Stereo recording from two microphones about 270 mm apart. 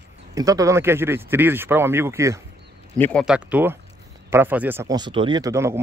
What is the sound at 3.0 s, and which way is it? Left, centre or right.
Speech, centre.